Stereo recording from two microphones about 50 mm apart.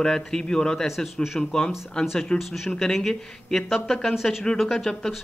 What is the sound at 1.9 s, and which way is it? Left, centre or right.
Speech, centre.